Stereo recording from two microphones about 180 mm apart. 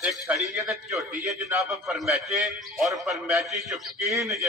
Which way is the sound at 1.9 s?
Centre (ahead or behind).